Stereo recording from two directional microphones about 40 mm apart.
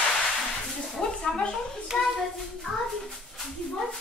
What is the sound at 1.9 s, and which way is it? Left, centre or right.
Speech, left.